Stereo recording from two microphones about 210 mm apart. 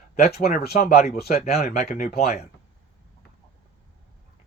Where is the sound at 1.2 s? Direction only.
45° left (ahead or behind); by 2.4 s 30° left (ahead or behind).